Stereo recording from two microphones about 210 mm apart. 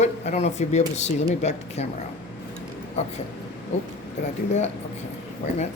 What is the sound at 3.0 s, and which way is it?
Speech, 30° left (ahead or behind).